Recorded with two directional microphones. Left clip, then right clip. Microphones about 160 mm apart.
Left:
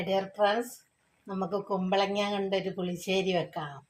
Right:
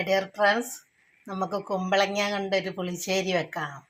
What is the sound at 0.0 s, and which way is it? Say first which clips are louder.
Speech: right 4 dB; 20° right (ahead or behind).